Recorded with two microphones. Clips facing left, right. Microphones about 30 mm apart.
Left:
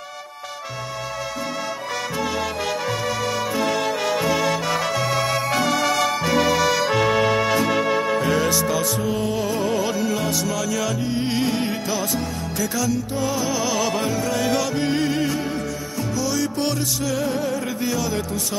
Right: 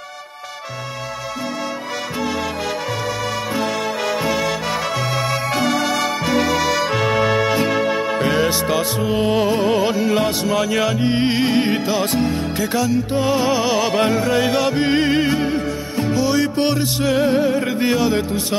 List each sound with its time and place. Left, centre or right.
8.2 s music: right